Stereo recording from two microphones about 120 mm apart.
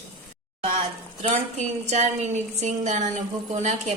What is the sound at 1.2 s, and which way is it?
A woman's voice, 70° right (ahead or behind).